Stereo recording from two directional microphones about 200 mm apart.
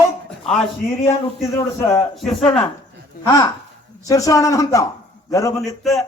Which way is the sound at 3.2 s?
45° left (ahead or behind).